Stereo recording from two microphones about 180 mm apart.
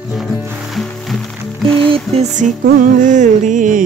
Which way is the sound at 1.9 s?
40° right (ahead or behind).